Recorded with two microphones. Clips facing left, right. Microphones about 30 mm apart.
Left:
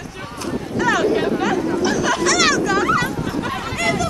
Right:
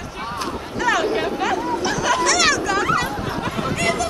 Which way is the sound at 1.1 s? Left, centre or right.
Centre.